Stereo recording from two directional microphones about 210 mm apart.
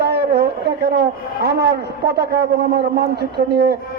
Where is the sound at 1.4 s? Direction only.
50° right (ahead or behind).